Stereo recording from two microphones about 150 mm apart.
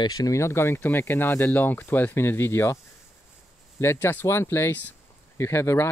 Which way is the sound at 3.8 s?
15° left (ahead or behind).